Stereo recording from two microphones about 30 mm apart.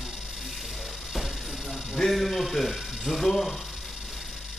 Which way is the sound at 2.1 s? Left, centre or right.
Centre.